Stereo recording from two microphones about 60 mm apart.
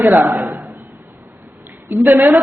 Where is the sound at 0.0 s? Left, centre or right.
Right.